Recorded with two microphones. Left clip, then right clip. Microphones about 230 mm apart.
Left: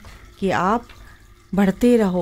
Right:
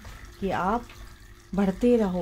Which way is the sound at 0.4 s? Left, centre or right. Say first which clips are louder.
Left 7 dB; left.